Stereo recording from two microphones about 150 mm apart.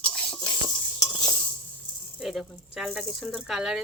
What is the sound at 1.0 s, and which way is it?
Stir, 25° left (ahead or behind).